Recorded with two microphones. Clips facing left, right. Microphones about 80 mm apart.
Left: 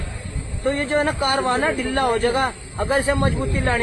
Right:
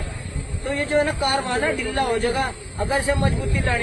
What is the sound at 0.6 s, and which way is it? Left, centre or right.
A man's voice, left.